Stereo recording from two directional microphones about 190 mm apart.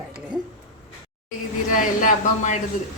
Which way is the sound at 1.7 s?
40° left (ahead or behind).